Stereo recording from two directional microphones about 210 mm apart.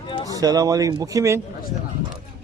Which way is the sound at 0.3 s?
15° right (ahead or behind).